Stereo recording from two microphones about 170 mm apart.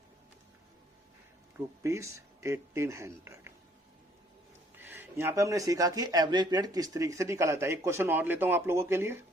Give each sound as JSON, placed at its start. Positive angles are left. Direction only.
{"t": 1.5, "sound": "speech", "side_deg": -15}
{"t": 4.8, "sound": "speech", "side_deg": -15}